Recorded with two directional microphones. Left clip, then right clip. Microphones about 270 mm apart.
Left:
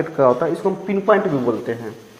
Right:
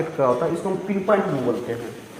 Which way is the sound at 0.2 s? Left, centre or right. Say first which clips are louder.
Left 5 dB; left.